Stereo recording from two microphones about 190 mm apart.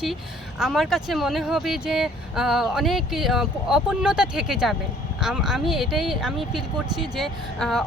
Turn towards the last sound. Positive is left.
turn(degrees=0)  # may be behind; listen again after turning